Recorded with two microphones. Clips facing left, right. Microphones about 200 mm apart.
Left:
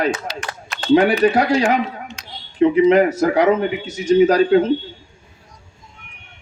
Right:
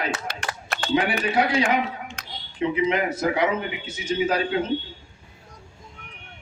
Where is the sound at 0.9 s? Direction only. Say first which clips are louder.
Left 10 dB; 45° left (ahead or behind).